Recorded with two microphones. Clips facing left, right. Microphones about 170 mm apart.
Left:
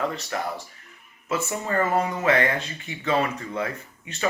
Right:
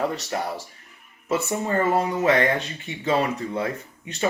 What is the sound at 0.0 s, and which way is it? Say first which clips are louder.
Speech: right 2 dB; 35° right (ahead or behind).